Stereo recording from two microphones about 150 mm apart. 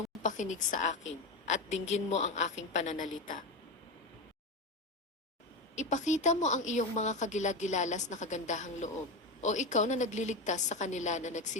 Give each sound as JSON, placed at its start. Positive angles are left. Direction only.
{"t": 0.2, "sound": "a woman's voice", "side_deg": 55}
{"t": 5.7, "sound": "a woman's voice", "side_deg": 55}